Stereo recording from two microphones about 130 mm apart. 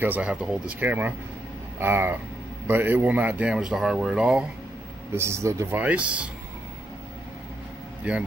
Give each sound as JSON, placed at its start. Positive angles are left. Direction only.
{"t": 0.0, "sound": "speech", "side_deg": -10}
{"t": 5.1, "sound": "speech", "side_deg": -20}